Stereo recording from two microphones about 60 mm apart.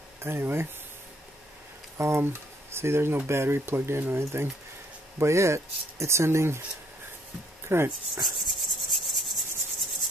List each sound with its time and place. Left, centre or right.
0.2 s speech: right
2.0 s speech: right
7.6 s speech: right
8.2 s rub: centre